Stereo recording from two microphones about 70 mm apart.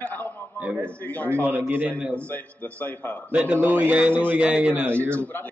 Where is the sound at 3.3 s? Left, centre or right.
Right.